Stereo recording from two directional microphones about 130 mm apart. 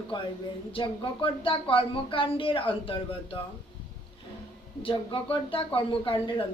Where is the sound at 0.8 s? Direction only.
45° left (ahead or behind).